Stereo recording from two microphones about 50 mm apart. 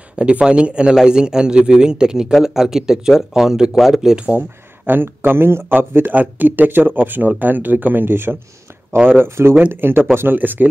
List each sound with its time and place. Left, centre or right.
0.1 s a man's voice: right
4.4 s speech: right